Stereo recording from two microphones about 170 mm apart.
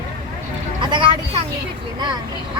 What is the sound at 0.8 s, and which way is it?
Speech, 30° right (ahead or behind).